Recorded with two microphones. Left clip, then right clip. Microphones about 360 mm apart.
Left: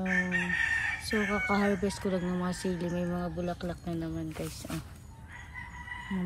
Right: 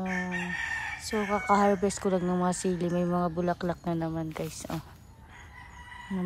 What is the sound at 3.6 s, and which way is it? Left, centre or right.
Speech, right.